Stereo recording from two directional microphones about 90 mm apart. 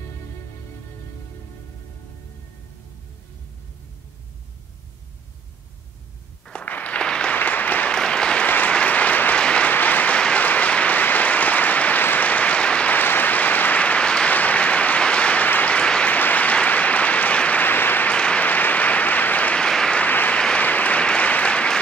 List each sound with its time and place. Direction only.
6.4 s applause: 15° left (ahead or behind)